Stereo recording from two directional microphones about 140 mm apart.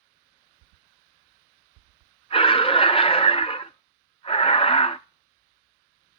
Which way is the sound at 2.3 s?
40° left (ahead or behind).